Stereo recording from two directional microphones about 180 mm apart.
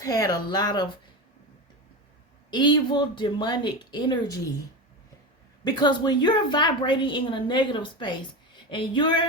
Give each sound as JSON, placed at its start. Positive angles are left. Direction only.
{"t": 0.0, "sound": "a woman's voice", "side_deg": 20}
{"t": 2.5, "sound": "a woman's voice", "side_deg": 25}
{"t": 5.6, "sound": "a woman's voice", "side_deg": 25}